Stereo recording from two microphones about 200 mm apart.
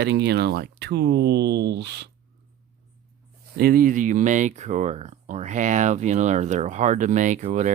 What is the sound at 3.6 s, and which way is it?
Speech, 45° right (ahead or behind).